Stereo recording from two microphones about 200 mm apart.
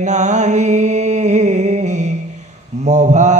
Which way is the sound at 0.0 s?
35° right (ahead or behind).